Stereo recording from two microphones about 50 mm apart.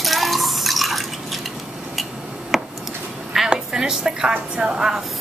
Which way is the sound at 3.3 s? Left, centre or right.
Centre.